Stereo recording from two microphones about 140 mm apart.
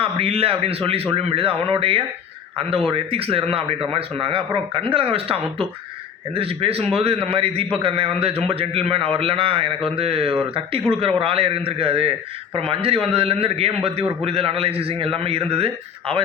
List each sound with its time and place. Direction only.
0.0 s a man's voice: 40° right (ahead or behind)